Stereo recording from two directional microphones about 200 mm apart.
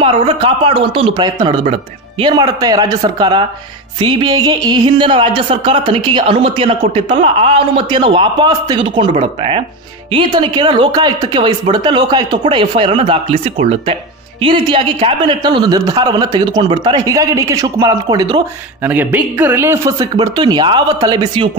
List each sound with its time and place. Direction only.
0.0 s speech: 25° right (ahead or behind)
18.8 s speech: 10° right (ahead or behind)